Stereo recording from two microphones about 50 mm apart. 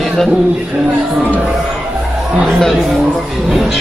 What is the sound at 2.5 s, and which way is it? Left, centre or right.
Speech, centre.